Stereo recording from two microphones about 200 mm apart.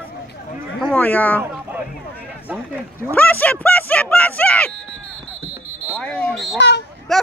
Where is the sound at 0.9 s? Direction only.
10° left (ahead or behind).